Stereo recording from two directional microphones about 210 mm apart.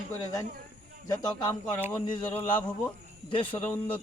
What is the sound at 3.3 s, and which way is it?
Speech, 25° left (ahead or behind).